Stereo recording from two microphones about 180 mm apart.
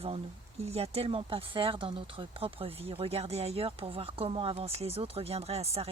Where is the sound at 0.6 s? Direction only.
35° right (ahead or behind).